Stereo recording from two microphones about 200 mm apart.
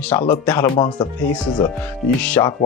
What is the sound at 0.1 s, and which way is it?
Speech, 15° left (ahead or behind).